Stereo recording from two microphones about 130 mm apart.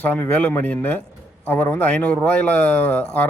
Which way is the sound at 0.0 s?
15° left (ahead or behind).